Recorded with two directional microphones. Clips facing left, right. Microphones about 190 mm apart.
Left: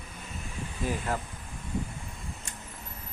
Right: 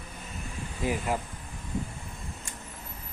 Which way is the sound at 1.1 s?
10° right (ahead or behind).